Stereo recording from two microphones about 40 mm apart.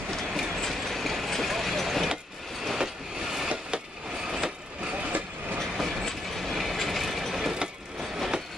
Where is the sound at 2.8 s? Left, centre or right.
Centre.